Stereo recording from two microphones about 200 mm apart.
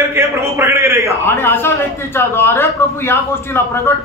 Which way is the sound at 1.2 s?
10° left (ahead or behind).